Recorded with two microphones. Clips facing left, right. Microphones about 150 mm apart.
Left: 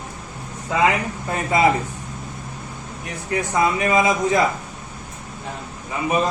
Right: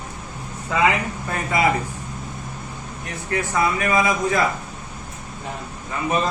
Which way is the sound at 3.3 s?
20° left (ahead or behind).